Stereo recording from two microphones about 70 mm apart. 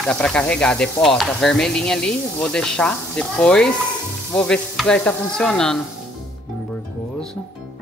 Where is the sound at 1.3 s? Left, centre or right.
Centre.